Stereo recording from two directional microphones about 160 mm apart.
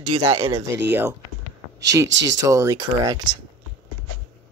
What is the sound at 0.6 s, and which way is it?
Speech, 15° right (ahead or behind).